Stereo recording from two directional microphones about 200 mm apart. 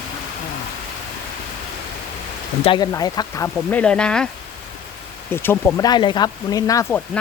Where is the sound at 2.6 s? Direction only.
25° left (ahead or behind).